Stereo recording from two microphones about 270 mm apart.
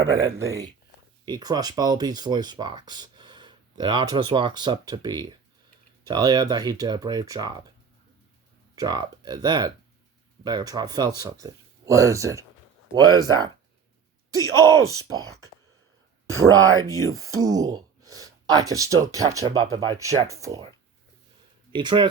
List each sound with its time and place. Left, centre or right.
0.1 s speech: centre
8.7 s speech: centre
16.6 s speech: centre
21.7 s speech: centre